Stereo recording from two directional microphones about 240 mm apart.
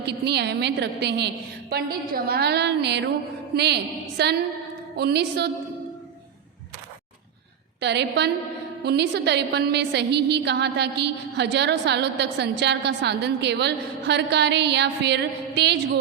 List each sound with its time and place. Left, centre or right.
0.0 s a woman's voice: right
7.8 s a woman's voice: right